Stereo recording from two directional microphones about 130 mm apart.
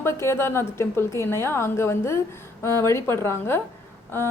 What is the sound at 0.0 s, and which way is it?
A woman's voice, 20° left (ahead or behind).